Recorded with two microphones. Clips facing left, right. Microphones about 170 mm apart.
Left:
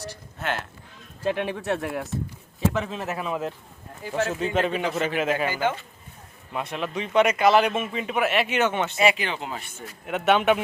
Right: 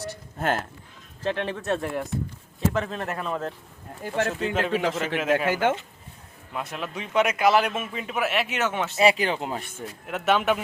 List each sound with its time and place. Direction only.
0.3 s speech: 45° right (ahead or behind)
1.2 s speech: 10° left (ahead or behind)
5.5 s speech: 65° right (ahead or behind)
6.5 s speech: centre (ahead or behind)
9.0 s speech: 35° right (ahead or behind)
10.1 s speech: centre (ahead or behind)